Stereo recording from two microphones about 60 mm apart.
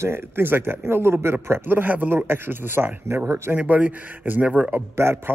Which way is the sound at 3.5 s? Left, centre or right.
Right.